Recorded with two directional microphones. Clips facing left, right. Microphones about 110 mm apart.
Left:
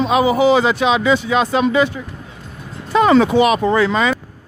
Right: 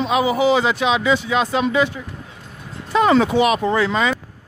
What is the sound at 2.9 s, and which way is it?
Speech, 80° left.